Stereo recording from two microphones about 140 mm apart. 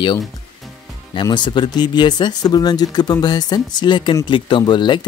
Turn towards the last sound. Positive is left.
turn(degrees=35)  # may be behind; listen again after turning